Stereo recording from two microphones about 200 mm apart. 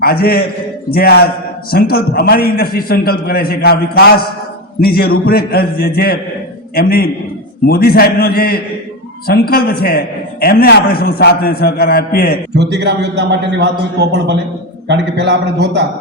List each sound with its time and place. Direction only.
0.0 s a man's voice: 50° left (ahead or behind)
12.5 s a man's voice: 60° right (ahead or behind)